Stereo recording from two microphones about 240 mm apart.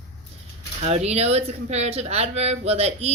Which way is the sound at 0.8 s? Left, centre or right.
Right.